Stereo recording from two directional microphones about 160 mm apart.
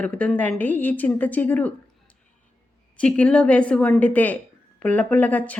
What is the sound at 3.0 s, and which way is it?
A woman's voice, 5° left (ahead or behind).